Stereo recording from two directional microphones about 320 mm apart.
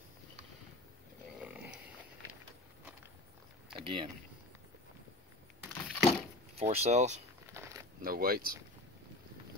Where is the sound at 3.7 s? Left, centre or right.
Centre.